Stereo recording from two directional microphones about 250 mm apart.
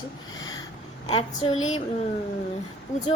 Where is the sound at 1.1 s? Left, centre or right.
Centre.